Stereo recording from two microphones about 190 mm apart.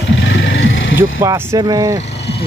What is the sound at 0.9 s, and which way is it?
Speech, 15° right (ahead or behind).